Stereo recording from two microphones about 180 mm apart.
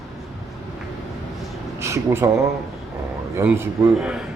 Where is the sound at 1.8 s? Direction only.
15° right (ahead or behind).